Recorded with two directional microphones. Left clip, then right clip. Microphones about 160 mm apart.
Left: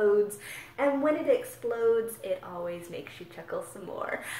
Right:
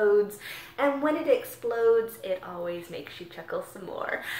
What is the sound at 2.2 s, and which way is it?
A woman's voice, 15° left (ahead or behind).